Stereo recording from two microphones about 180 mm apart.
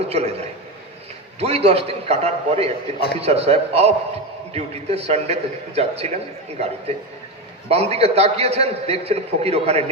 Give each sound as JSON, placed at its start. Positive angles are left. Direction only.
{"t": 0.0, "sound": "a man's voice", "side_deg": -35}
{"t": 7.7, "sound": "a man's voice", "side_deg": -35}